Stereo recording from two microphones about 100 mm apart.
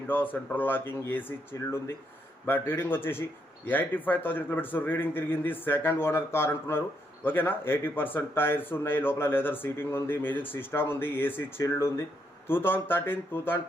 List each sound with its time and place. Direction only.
0.1 s speech: 20° left (ahead or behind)
2.5 s speech: 20° left (ahead or behind)